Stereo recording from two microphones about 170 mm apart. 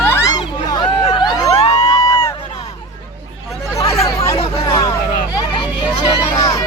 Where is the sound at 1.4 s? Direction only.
35° left (ahead or behind).